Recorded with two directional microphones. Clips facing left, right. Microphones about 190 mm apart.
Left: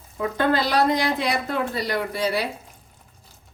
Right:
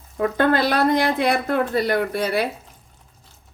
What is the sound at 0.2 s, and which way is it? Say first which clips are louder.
Speech: right 3 dB; 55° right (ahead or behind).